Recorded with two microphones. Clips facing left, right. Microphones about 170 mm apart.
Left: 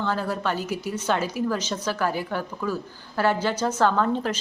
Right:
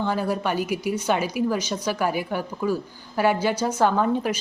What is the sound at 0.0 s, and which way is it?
A woman's voice, 15° right (ahead or behind).